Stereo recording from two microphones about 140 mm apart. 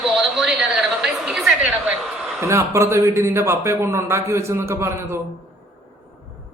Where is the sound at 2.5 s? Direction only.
20° right (ahead or behind).